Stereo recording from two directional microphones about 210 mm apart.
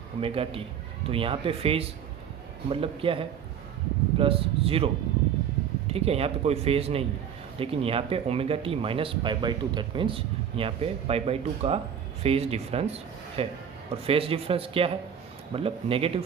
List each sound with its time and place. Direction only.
0.2 s speech: 25° right (ahead or behind)
5.9 s speech: 30° right (ahead or behind)